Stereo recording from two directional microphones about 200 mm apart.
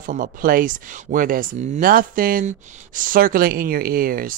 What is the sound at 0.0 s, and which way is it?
Speech, 45° right (ahead or behind).